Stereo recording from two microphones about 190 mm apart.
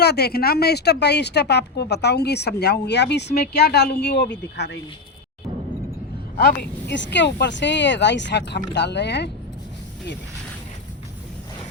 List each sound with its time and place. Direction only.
0.0 s speech: 60° left (ahead or behind)
6.3 s speech: 60° left (ahead or behind)